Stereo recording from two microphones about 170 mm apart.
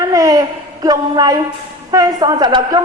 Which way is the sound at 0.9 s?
25° right (ahead or behind).